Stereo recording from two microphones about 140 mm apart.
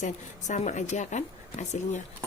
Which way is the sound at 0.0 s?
60° left (ahead or behind).